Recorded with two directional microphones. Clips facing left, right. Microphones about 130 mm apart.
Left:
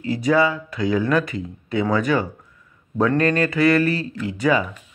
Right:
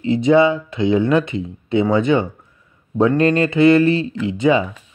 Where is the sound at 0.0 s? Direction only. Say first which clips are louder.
Right 5 dB; 25° right (ahead or behind).